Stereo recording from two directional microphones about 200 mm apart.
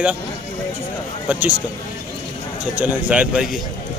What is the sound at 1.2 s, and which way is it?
Speech, 5° right (ahead or behind).